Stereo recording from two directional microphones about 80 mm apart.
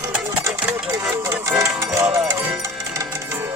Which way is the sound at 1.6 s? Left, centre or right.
Right.